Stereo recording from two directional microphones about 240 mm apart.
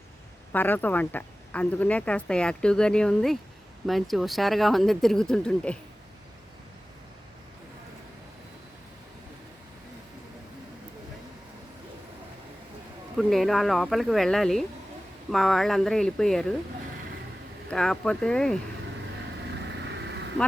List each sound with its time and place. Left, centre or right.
0.5 s speech: centre
13.1 s speech: centre
17.7 s speech: centre
19.6 s vehicle: right